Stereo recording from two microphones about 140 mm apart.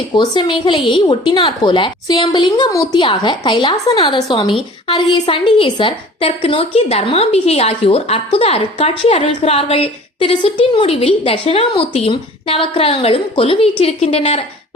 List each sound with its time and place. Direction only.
0.1 s a woman's voice: 30° left (ahead or behind); by 14.4 s 50° left (ahead or behind)